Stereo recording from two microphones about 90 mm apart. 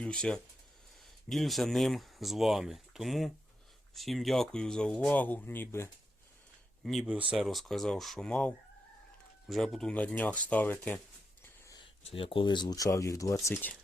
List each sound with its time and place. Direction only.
0.0 s speech: 10° left (ahead or behind); by 5.9 s 25° left (ahead or behind)
7.0 s speech: 10° right (ahead or behind)
8.3 s speech: 15° left (ahead or behind)
9.5 s speech: centre (ahead or behind)
9.9 s speech: 15° left (ahead or behind)
11.8 s speech: 85° left; by 12.7 s 60° left (ahead or behind)
12.7 s speech: 40° left (ahead or behind)